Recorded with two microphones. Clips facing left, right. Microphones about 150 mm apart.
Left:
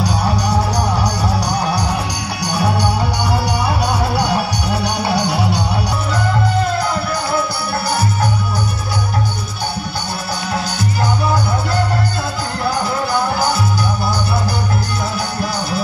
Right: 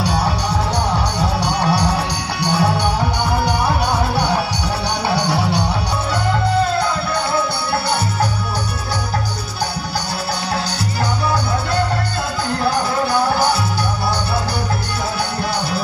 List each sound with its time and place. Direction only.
1.4 s music: 30° right (ahead or behind)
2.4 s jingle bell: 25° right (ahead or behind)
4.8 s music: 25° right (ahead or behind)